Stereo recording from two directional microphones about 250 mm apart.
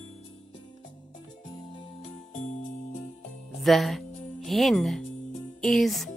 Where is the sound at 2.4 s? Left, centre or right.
Left.